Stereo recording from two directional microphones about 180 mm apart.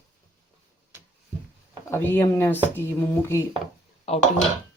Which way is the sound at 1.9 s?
15° left (ahead or behind).